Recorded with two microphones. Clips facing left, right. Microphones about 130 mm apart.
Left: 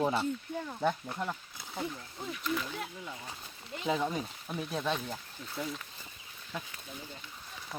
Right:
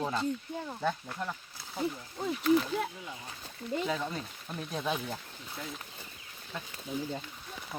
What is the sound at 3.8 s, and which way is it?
Speech, 15° left (ahead or behind).